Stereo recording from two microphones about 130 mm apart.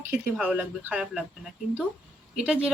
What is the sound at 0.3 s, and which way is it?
Speech, 10° right (ahead or behind).